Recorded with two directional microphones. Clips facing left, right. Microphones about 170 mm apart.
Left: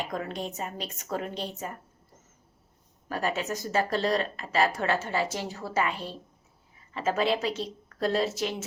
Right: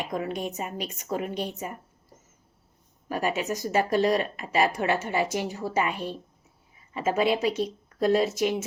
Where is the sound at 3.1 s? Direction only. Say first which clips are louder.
Right 2 dB; 15° right (ahead or behind).